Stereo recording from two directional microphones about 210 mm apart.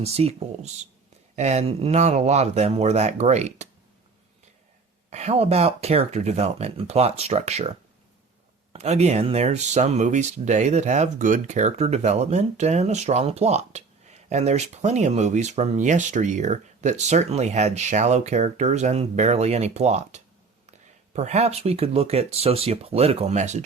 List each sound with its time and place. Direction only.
0.0 s speech: 30° right (ahead or behind)
5.1 s speech: 30° right (ahead or behind)